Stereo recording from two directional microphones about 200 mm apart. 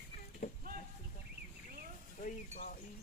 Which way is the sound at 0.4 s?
35° left (ahead or behind).